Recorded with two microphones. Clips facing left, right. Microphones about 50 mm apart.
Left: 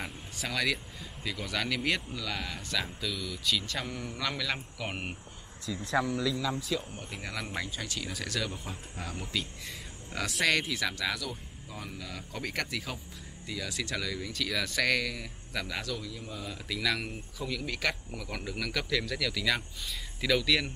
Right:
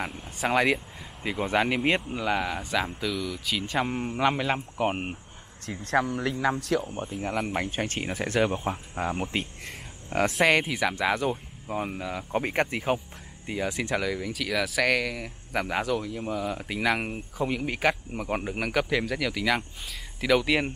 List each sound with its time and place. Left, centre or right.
0.5 s speech: right; by 3.5 s centre
3.5 s speech: right
3.8 s speech: right
5.9 s speech: right
7.3 s speech: right
10.4 s speech: right
12.1 s speech: right
14.3 s speech: centre
15.8 s speech: right